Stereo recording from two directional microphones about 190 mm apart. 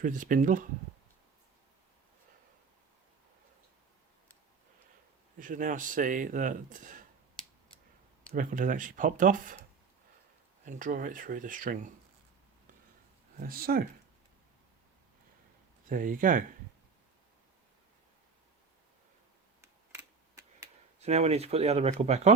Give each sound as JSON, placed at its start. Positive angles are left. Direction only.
{"t": 0.0, "sound": "speech", "side_deg": -45}
{"t": 5.4, "sound": "speech", "side_deg": -45}
{"t": 8.3, "sound": "speech", "side_deg": -45}
{"t": 10.7, "sound": "speech", "side_deg": -45}
{"t": 13.3, "sound": "speech", "side_deg": -50}
{"t": 15.9, "sound": "speech", "side_deg": -45}
{"t": 19.6, "sound": "a sound", "side_deg": -15}
{"t": 21.0, "sound": "speech", "side_deg": -35}